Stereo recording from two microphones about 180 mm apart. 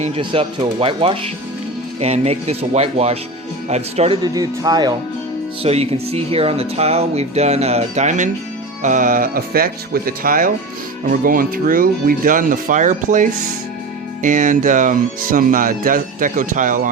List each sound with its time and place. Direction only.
0.2 s speech: 30° right (ahead or behind)
4.2 s speech: 20° right (ahead or behind)
5.6 s speech: 35° right (ahead or behind)